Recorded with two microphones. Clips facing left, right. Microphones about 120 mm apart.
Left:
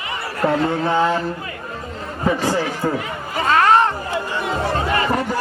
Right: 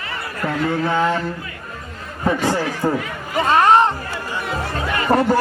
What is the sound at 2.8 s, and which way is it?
Speech, 10° right (ahead or behind).